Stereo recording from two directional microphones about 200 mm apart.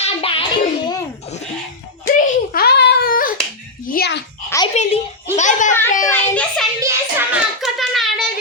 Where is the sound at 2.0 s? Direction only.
40° left (ahead or behind).